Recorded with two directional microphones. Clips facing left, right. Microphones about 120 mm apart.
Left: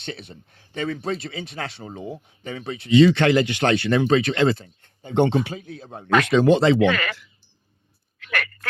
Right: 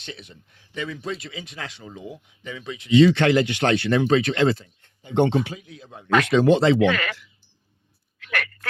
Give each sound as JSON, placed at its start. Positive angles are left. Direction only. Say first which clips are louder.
{"t": 0.0, "sound": "speech", "louder": "left 5 dB", "side_deg": 35}
{"t": 8.2, "sound": "frog", "louder": "left 1 dB", "side_deg": 40}